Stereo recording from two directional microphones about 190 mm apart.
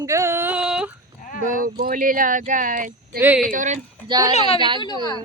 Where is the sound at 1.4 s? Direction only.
45° right (ahead or behind).